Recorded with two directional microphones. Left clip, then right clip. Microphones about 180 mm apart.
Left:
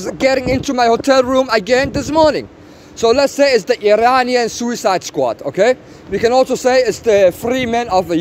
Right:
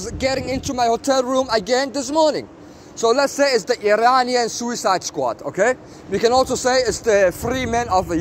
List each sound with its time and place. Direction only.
0.0 s speech: 50° left (ahead or behind)
6.1 s speech: 40° left (ahead or behind); by 8.2 s 55° left (ahead or behind)